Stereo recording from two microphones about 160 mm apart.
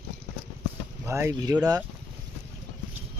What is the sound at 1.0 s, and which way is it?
Speech, 15° right (ahead or behind).